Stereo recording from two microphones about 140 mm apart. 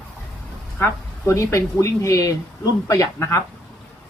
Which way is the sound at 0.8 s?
20° left (ahead or behind).